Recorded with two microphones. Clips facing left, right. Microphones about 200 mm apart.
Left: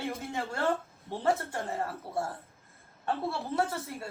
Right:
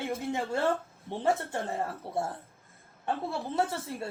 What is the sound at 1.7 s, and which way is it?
A woman's voice, 15° right (ahead or behind).